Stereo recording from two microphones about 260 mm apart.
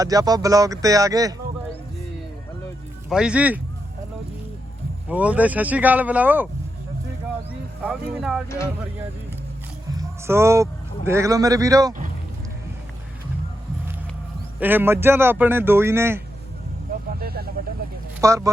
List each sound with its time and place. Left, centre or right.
0.0 s speech: centre
3.1 s speech: centre
5.0 s speech: centre
7.8 s speech: centre
8.4 s speech: centre
9.9 s a man's voice: centre
14.6 s speech: centre
17.2 s vehicle: right
18.2 s speech: centre